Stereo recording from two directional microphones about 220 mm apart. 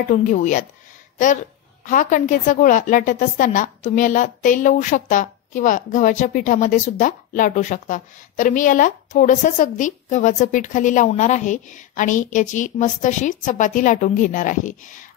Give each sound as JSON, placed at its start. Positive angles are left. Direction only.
{"t": 0.1, "sound": "a woman's voice", "side_deg": 35}